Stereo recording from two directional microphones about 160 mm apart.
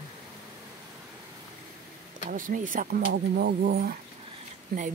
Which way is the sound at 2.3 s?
55° right (ahead or behind).